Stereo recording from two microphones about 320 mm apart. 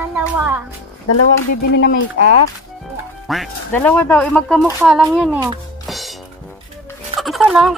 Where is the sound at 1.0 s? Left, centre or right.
Left.